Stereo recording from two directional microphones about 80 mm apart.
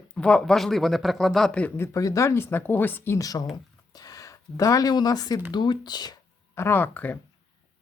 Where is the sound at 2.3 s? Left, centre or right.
Left.